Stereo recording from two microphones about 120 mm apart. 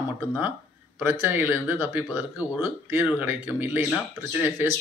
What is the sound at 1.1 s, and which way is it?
Speech, 15° right (ahead or behind).